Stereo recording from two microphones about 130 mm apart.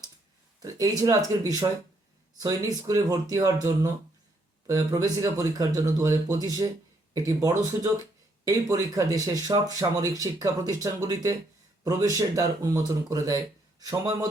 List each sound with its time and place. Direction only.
0.6 s speech: 30° right (ahead or behind)